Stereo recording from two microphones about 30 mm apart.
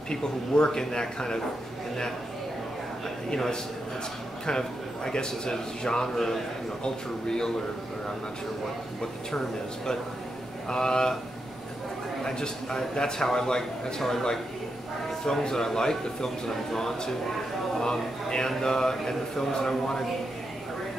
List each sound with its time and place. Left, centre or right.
0.1 s a man's voice: left
4.5 s a man's voice: left
6.1 s speech: centre
6.8 s a man's voice: left
10.7 s a man's voice: left
12.2 s a man's voice: left
15.4 s a man's voice: centre